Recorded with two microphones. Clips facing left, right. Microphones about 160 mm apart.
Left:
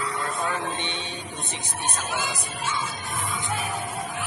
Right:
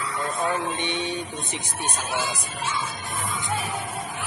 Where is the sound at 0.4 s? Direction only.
10° right (ahead or behind).